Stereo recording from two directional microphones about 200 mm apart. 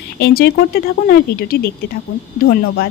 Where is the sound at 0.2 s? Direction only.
50° left (ahead or behind).